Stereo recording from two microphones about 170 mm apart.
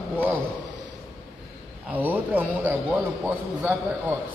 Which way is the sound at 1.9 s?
10° right (ahead or behind).